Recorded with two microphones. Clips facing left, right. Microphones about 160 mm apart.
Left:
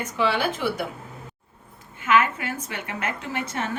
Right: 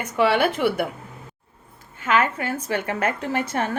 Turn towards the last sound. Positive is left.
turn(degrees=-50)  # may be behind; listen again after turning